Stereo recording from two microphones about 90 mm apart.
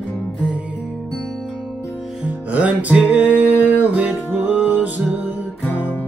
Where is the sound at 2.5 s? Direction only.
15° right (ahead or behind).